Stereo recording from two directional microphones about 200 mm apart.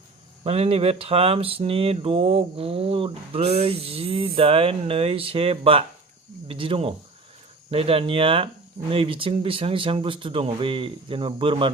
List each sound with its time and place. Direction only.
0.4 s speech: 30° right (ahead or behind)